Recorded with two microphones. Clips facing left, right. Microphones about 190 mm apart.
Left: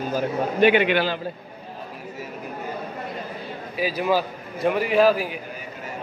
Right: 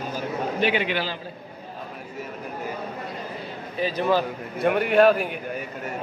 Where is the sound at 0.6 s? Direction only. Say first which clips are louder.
Left 8 dB; 60° left (ahead or behind).